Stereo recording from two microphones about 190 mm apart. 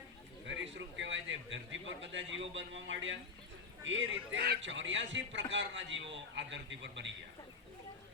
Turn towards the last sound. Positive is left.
turn(degrees=-70)  # may be behind; listen again after turning